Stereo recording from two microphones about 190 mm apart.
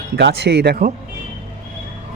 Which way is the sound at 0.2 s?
65° right (ahead or behind).